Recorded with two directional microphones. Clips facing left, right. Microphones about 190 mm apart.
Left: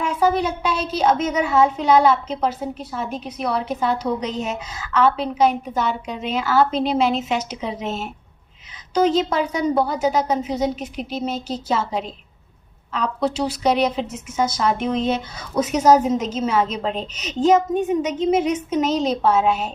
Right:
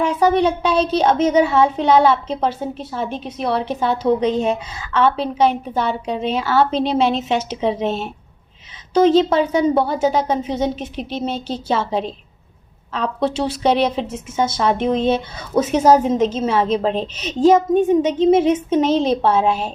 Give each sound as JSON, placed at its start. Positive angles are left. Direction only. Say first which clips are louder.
{"t": 0.0, "sound": "a woman's voice", "louder": "right 4 dB", "side_deg": -30}